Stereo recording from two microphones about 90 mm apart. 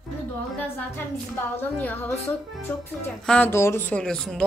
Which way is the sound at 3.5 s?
30° left (ahead or behind).